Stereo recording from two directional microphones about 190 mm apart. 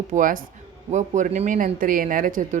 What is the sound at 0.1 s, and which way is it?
Speech, 45° right (ahead or behind).